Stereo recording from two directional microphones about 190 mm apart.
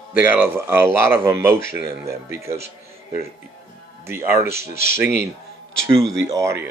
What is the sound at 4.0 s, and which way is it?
Speech, 10° right (ahead or behind).